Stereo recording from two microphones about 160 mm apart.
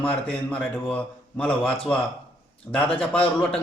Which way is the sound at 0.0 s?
10° left (ahead or behind).